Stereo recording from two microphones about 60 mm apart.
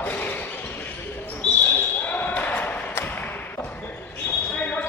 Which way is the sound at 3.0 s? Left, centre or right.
Left.